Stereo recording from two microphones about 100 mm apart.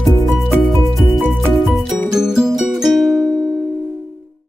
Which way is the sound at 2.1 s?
5° right (ahead or behind).